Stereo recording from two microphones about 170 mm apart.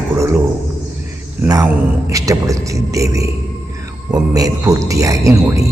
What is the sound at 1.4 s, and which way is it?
A man's voice, 20° right (ahead or behind).